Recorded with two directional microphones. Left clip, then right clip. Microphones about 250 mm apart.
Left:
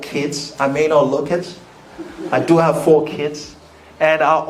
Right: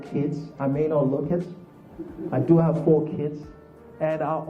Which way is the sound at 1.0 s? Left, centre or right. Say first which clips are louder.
Left 8 dB; left.